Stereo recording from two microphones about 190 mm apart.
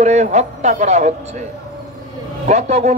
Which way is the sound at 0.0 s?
35° right (ahead or behind).